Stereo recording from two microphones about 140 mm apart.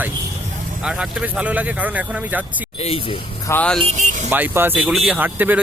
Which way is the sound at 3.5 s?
5° left (ahead or behind).